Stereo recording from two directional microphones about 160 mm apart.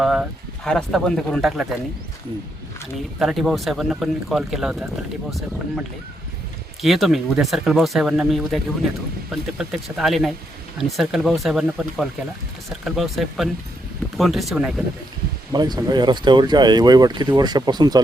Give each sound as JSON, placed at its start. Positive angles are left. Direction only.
{"t": 0.0, "sound": "speech", "side_deg": 0}
{"t": 3.2, "sound": "speech", "side_deg": 0}
{"t": 6.8, "sound": "speech", "side_deg": 0}
{"t": 15.5, "sound": "speech", "side_deg": -25}